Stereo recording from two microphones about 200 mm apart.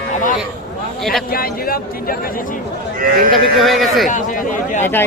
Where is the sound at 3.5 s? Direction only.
Centre (ahead or behind).